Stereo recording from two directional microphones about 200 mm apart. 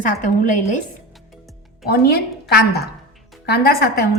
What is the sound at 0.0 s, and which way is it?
Speech, 40° left (ahead or behind).